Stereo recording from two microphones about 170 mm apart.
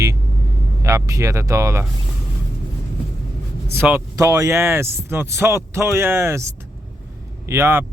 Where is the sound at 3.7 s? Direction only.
10° right (ahead or behind).